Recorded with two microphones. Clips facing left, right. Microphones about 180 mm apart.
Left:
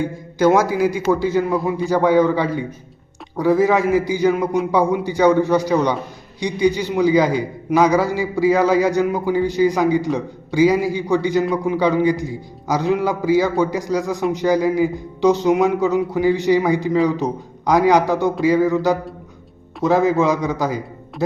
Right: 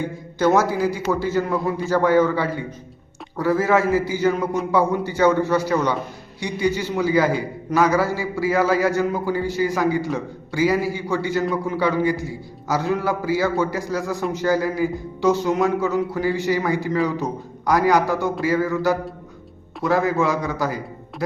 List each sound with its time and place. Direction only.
0.3 s a man's voice: 10° left (ahead or behind)